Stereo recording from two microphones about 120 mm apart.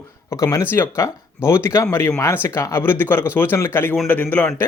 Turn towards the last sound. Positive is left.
turn(degrees=15)  # may be behind; listen again after turning